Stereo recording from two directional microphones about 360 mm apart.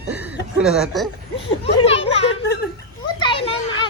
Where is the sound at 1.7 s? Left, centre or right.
Centre.